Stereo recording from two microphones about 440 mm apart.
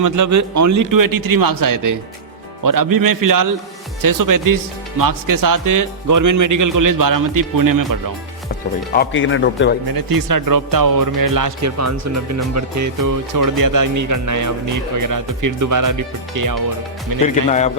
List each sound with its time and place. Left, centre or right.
0.0 s speech: right
9.0 s speech: left
9.9 s speech: right
17.2 s speech: centre